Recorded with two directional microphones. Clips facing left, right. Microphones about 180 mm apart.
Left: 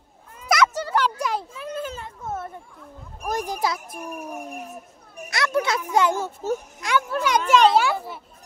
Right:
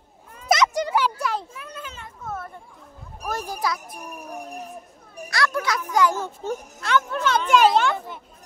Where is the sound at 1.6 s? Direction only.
35° left (ahead or behind).